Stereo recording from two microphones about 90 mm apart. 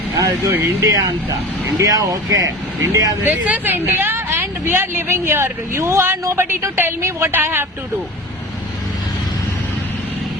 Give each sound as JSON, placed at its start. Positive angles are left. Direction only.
{"t": 0.5, "sound": "speech", "side_deg": -35}
{"t": 3.2, "sound": "speech", "side_deg": -20}